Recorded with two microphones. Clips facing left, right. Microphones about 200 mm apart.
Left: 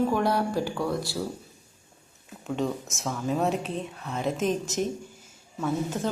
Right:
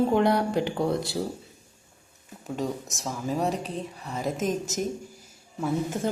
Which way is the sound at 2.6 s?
Centre (ahead or behind).